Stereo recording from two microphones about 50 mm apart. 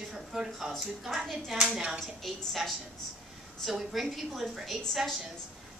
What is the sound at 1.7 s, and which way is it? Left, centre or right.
Speech, centre.